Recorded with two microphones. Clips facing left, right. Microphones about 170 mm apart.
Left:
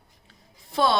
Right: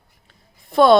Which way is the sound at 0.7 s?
55° right (ahead or behind).